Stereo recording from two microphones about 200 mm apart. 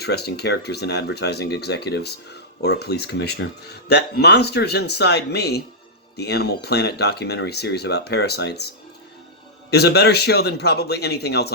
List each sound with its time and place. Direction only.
0.0 s speech: 55° left (ahead or behind)